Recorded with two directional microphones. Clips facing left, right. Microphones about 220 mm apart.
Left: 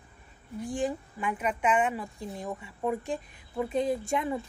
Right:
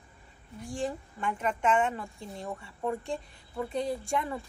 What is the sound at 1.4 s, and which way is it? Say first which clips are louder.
A woman's voice: even; 15° left (ahead or behind).